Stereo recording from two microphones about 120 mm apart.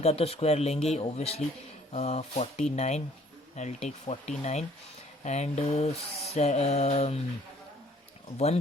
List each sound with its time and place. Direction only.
0.0 s mantra: 55° left (ahead or behind)
1.9 s speech: 65° left (ahead or behind)
5.2 s mantra: 70° left (ahead or behind)